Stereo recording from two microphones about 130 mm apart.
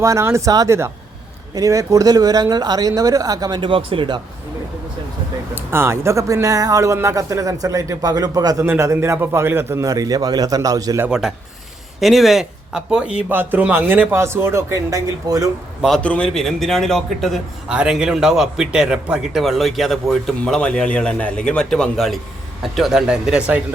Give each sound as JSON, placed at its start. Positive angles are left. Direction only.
{"t": 0.0, "sound": "speech", "side_deg": -20}
{"t": 5.5, "sound": "speech", "side_deg": -20}
{"t": 11.0, "sound": "a man's voice", "side_deg": -5}
{"t": 16.0, "sound": "a man's voice", "side_deg": 10}